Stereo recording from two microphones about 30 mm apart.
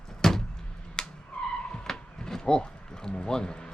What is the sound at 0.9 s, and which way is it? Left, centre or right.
Skidding, left.